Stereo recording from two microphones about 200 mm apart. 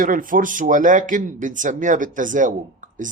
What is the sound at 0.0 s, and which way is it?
Speech, 45° right (ahead or behind).